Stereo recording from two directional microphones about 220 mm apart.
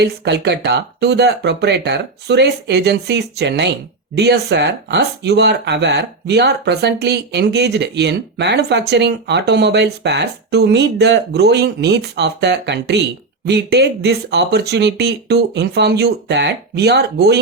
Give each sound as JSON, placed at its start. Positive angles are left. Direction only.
{"t": 0.0, "sound": "speech", "side_deg": -50}